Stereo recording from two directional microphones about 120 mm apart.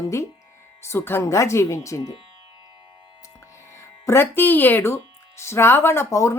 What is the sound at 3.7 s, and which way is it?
Speech, 20° left (ahead or behind).